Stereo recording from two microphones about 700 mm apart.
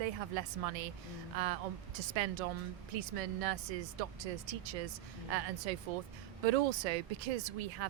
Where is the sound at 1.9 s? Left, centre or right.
Right.